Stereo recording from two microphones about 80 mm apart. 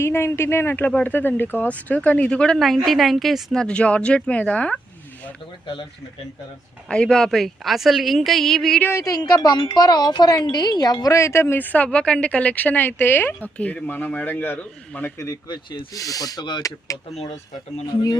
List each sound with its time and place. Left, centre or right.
0.0 s speech: left; by 4.8 s centre
6.8 s a woman's voice: centre
8.8 s speech: left
9.3 s a woman's voice: left
11.0 s speech: left
15.4 s speech: left
16.0 s speech: left
17.8 s a woman's voice: left